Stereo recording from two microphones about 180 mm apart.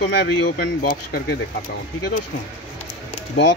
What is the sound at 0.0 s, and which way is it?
Speech, 70° left (ahead or behind).